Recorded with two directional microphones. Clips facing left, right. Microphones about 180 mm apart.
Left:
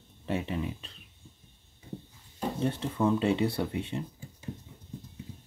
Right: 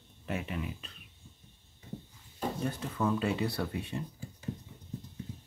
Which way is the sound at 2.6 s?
25° left (ahead or behind).